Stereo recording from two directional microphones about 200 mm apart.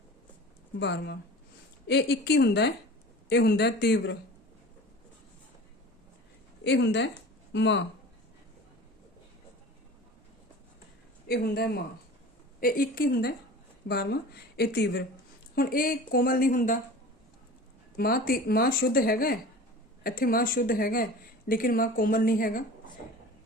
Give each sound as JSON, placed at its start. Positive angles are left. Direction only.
{"t": 0.8, "sound": "speech", "side_deg": 60}
{"t": 6.7, "sound": "speech", "side_deg": 60}
{"t": 11.3, "sound": "speech", "side_deg": 50}
{"t": 17.9, "sound": "speech", "side_deg": 50}